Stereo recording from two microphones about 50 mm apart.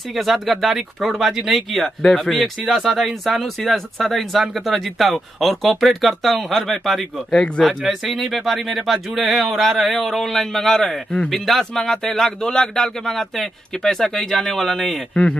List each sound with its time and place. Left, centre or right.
0.1 s speech: centre
2.0 s speech: centre
2.7 s speech: centre
7.3 s speech: left
7.6 s speech: centre